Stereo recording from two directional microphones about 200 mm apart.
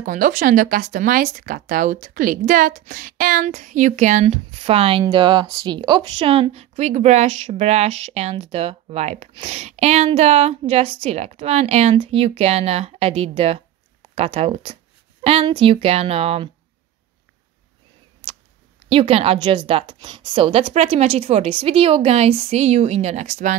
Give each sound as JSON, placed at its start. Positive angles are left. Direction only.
{"t": 0.0, "sound": "a woman's voice", "side_deg": -40}
{"t": 18.9, "sound": "a woman's voice", "side_deg": -30}